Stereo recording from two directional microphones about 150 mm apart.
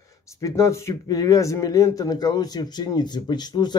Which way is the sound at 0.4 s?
20° left (ahead or behind).